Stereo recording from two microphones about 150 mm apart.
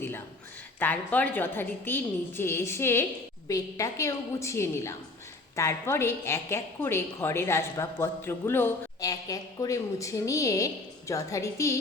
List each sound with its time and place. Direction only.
0.8 s a woman's voice: 10° left (ahead or behind)